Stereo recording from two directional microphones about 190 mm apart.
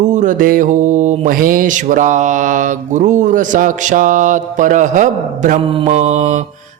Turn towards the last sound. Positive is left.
turn(degrees=-40)  # may be behind; listen again after turning